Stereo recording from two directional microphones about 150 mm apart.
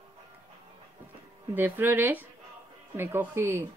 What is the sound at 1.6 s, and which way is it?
Speech, 15° right (ahead or behind).